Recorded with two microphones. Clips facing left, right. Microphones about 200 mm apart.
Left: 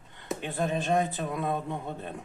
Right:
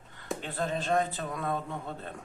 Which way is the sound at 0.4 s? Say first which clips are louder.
Left 3 dB; 15° left (ahead or behind).